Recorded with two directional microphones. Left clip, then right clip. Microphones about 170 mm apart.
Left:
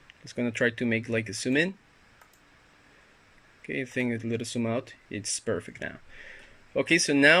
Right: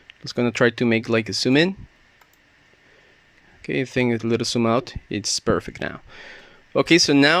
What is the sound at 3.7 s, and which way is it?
Speech, 45° right (ahead or behind).